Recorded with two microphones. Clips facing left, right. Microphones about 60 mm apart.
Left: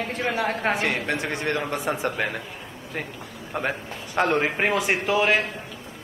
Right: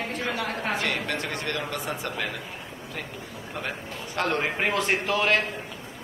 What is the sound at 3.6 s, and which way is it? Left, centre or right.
A man's voice, left.